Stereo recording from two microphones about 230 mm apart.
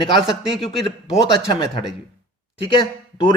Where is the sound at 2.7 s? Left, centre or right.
Centre.